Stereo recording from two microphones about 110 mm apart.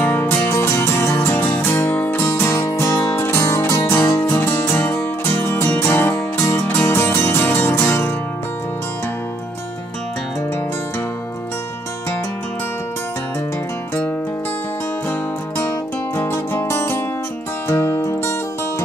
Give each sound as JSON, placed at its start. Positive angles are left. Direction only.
{"t": 0.0, "sound": "music", "side_deg": 20}
{"t": 16.2, "sound": "music", "side_deg": 20}